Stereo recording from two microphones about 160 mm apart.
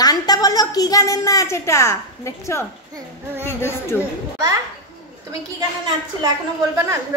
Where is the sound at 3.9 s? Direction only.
20° right (ahead or behind).